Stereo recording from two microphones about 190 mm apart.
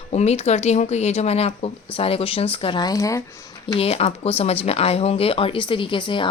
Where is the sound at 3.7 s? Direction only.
30° left (ahead or behind).